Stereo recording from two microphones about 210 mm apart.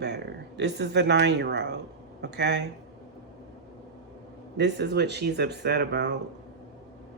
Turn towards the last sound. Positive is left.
turn(degrees=-55)  # may be behind; listen again after turning